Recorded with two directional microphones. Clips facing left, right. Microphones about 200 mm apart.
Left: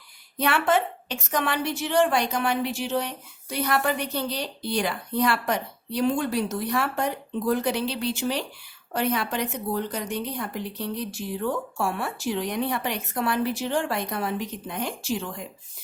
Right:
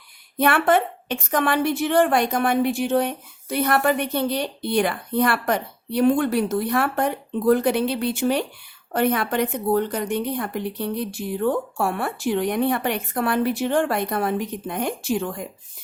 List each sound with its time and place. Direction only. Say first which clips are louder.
0.3 s a woman's voice: right 4 dB; 55° right (ahead or behind)